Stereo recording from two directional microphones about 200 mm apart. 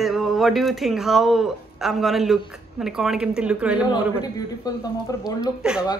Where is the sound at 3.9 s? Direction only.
20° left (ahead or behind).